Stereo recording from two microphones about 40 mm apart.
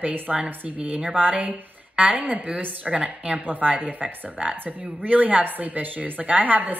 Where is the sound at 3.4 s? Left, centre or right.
Right.